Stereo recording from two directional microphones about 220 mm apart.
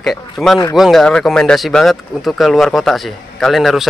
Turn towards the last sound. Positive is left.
turn(degrees=0)  # may be behind; listen again after turning